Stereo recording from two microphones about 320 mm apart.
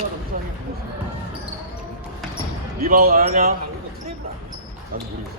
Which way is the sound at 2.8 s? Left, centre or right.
Right.